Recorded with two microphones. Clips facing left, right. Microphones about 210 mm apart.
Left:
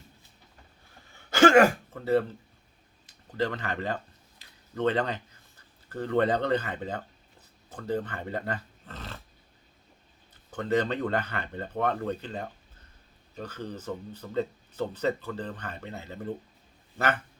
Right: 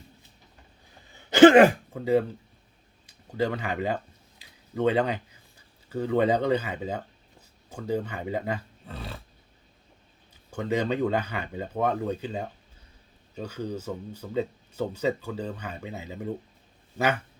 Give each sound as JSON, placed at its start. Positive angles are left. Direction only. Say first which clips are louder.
{"t": 1.1, "sound": "throat clearing", "louder": "right 5 dB", "side_deg": -20}
{"t": 3.1, "sound": "speech", "louder": "right 2 dB", "side_deg": -10}
{"t": 10.5, "sound": "speech", "louder": "even", "side_deg": -10}